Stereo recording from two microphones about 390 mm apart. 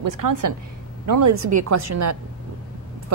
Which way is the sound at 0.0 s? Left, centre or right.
Right.